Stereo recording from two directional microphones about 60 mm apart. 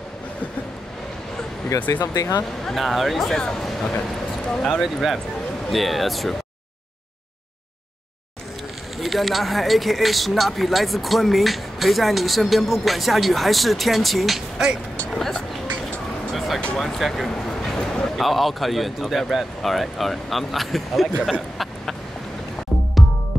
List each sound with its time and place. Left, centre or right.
1.9 s speech: left
2.6 s speech: centre
8.9 s speech: centre
16.3 s music: centre
16.7 s speech: centre